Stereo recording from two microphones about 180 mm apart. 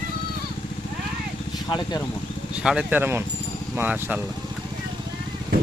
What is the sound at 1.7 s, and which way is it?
Speech, 25° left (ahead or behind).